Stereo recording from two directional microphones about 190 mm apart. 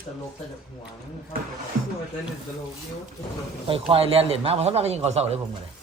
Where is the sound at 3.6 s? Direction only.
30° right (ahead or behind).